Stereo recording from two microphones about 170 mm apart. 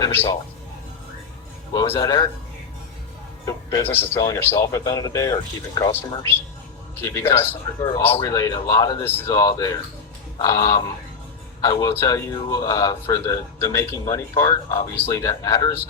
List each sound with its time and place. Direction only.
0.0 s a man's voice: 10° left (ahead or behind)
1.7 s a man's voice: 20° left (ahead or behind)
3.4 s a man's voice: 20° left (ahead or behind)